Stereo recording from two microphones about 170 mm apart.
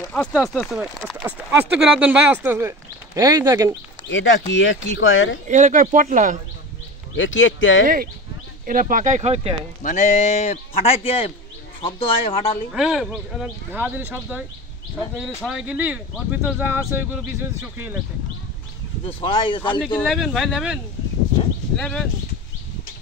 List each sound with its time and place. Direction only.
0.1 s speech: 5° left (ahead or behind); by 3.7 s 15° right (ahead or behind)
4.1 s speech: 90° left
5.5 s speech: 45° right (ahead or behind)
7.2 s speech: 90° left
7.8 s speech: 55° right (ahead or behind); by 9.6 s 35° right (ahead or behind)
9.8 s a man's voice: 45° left (ahead or behind)
12.7 s speech: 5° right (ahead or behind)
19.0 s speech: 30° left (ahead or behind)
20.0 s speech: centre (ahead or behind)